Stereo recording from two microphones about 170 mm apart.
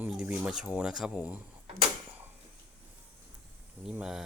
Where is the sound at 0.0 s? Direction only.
5° right (ahead or behind).